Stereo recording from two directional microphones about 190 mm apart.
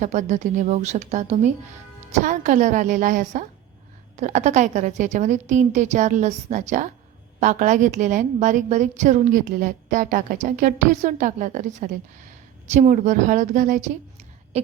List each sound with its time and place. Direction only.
0.0 s a woman's voice: 40° right (ahead or behind)